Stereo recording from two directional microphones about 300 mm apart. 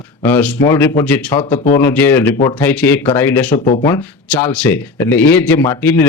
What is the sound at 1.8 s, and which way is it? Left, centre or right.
Speech, centre.